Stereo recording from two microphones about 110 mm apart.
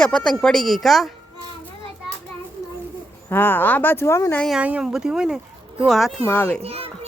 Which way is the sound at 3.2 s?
20° left (ahead or behind).